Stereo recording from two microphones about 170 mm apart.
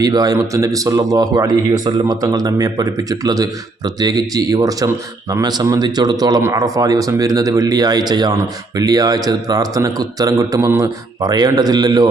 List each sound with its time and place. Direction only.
0.0 s a man's voice: 20° right (ahead or behind)